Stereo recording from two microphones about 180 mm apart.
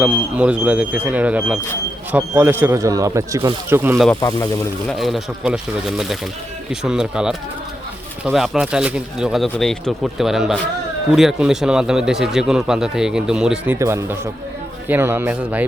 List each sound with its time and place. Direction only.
0.0 s speech: 5° right (ahead or behind)
4.2 s speech: 20° left (ahead or behind)
4.9 s speech: centre (ahead or behind)
6.7 s speech: 5° right (ahead or behind)